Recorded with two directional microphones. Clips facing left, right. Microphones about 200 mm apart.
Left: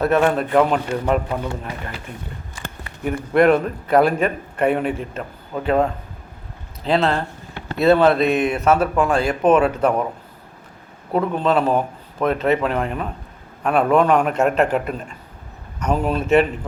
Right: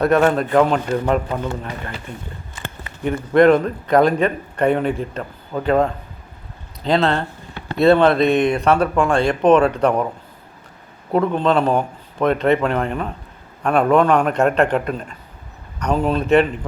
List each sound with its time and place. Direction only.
0.0 s speech: 5° left (ahead or behind)
3.0 s a man's voice: 5° left (ahead or behind)
11.1 s speech: 5° left (ahead or behind)